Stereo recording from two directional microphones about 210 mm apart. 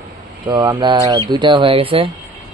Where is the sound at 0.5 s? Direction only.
20° right (ahead or behind).